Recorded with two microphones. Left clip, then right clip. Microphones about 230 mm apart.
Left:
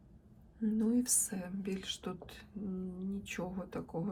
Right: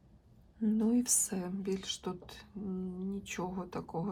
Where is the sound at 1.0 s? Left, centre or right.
Centre.